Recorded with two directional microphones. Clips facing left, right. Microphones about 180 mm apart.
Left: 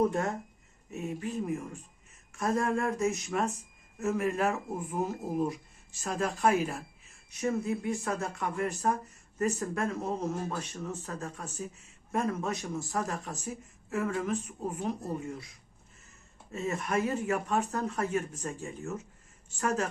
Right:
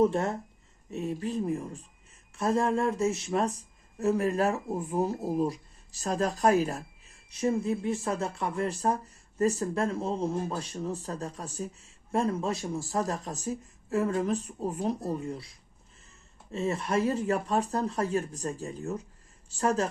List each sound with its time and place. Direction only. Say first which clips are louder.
0.0 s speech: right 3 dB; 30° right (ahead or behind)